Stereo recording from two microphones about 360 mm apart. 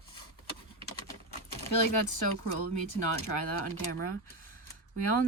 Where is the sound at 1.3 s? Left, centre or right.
Left.